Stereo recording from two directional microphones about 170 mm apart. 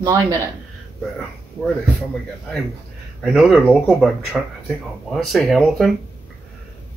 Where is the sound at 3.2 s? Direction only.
Centre (ahead or behind).